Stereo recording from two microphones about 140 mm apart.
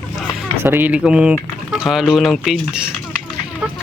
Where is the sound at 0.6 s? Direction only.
15° right (ahead or behind).